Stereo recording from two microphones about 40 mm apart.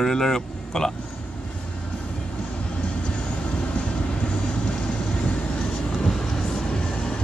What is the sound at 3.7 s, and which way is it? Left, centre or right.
Vehicle, left.